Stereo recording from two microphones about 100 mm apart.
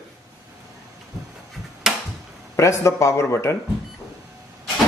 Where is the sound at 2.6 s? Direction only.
30° left (ahead or behind).